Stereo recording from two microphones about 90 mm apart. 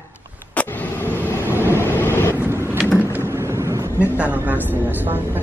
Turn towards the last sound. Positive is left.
turn(degrees=-25)  # may be behind; listen again after turning